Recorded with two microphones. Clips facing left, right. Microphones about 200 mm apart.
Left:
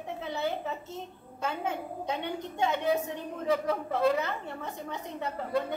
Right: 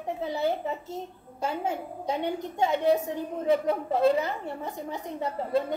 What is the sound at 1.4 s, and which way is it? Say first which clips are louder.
Speech: right 3 dB; 25° right (ahead or behind).